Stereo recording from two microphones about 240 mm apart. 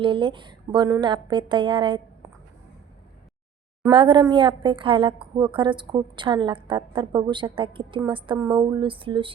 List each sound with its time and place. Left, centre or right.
0.0 s a woman's voice: right
2.2 s a sound: centre
3.8 s a woman's voice: centre